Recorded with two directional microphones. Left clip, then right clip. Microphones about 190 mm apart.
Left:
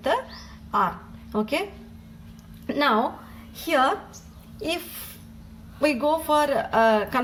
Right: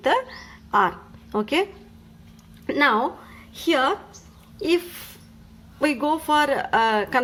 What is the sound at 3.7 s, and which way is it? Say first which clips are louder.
Speech: right 1 dB; 35° right (ahead or behind).